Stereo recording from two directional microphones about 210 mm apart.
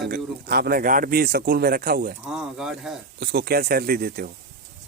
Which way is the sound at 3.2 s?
50° right (ahead or behind).